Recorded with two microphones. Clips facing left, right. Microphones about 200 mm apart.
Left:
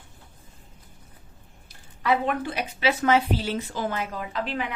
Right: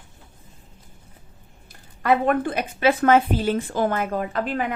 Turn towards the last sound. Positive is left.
turn(degrees=-50)  # may be behind; listen again after turning